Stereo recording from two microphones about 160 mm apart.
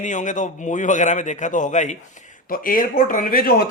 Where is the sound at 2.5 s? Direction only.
60° left (ahead or behind).